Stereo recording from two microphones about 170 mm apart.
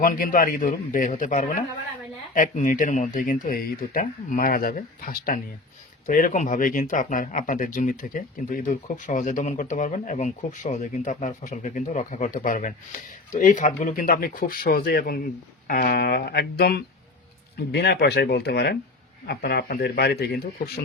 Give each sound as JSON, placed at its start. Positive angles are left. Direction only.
{"t": 0.0, "sound": "speech", "side_deg": 55}